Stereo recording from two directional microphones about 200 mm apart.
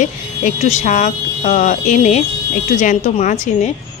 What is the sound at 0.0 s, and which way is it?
A woman's voice, 35° left (ahead or behind).